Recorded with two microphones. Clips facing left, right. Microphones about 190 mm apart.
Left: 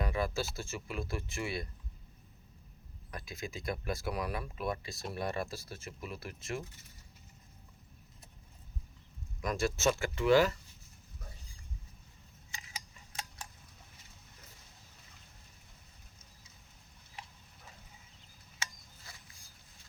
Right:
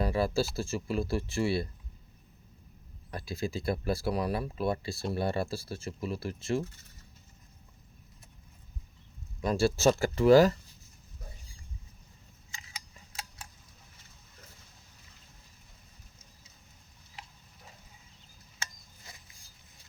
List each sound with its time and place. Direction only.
0.0 s speech: 35° right (ahead or behind)
3.1 s speech: 35° right (ahead or behind)
9.4 s speech: 30° right (ahead or behind)